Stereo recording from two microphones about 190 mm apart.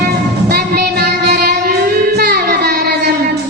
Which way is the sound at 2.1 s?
55° right (ahead or behind).